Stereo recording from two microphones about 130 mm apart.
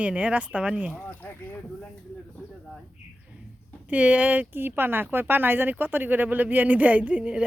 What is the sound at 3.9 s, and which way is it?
Speech, 10° right (ahead or behind).